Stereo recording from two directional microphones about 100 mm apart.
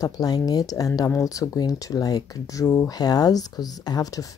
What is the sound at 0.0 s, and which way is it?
Speech, 40° left (ahead or behind).